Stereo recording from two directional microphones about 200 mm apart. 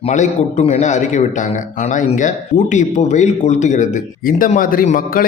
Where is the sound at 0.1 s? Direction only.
35° left (ahead or behind).